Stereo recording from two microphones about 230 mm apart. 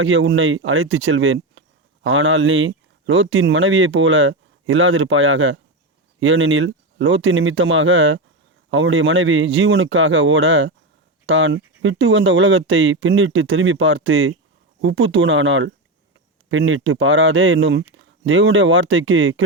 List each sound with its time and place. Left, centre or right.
0.0 s speech: right